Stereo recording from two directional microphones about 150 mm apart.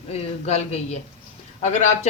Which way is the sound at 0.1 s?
45° left (ahead or behind).